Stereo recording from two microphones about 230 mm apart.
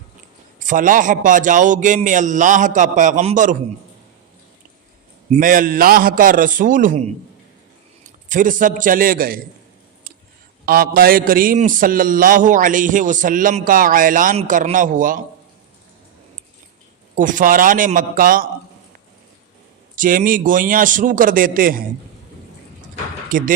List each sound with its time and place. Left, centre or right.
0.6 s a man's voice: right
5.3 s a man's voice: right
8.3 s a man's voice: right
10.7 s a man's voice: right
17.2 s a man's voice: right
20.0 s a man's voice: right